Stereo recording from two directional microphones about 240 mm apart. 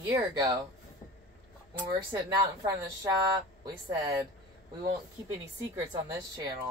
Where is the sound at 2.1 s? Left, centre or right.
Centre.